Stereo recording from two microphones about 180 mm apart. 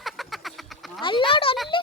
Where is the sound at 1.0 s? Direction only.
25° left (ahead or behind).